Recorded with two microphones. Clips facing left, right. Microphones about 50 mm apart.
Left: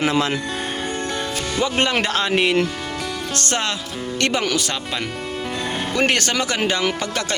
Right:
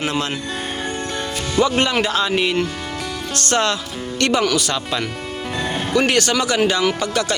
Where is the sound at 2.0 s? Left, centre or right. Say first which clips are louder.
Right 1 dB; left.